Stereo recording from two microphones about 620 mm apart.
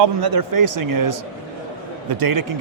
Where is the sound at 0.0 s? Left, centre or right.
Right.